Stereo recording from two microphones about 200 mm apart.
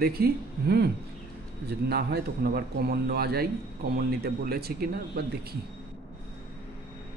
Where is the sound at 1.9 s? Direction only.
55° right (ahead or behind).